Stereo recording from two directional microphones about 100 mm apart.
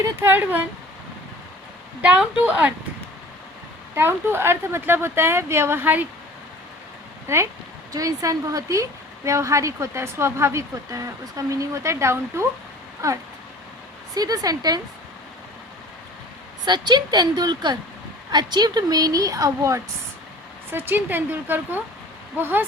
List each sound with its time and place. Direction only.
0.0 s speech: 20° right (ahead or behind)
2.0 s a woman's voice: 15° right (ahead or behind)
3.9 s speech: 25° right (ahead or behind)
7.3 s a woman's voice: 30° right (ahead or behind)
16.6 s a woman's voice: 45° right (ahead or behind)
20.7 s speech: 20° right (ahead or behind)